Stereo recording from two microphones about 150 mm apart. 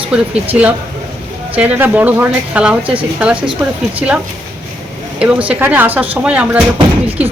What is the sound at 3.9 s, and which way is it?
Speech, 10° right (ahead or behind).